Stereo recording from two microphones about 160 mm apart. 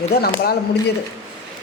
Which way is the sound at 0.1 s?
75° left (ahead or behind).